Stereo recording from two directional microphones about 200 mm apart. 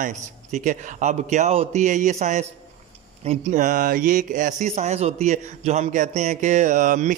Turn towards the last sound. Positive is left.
turn(degrees=-40)  # may be behind; listen again after turning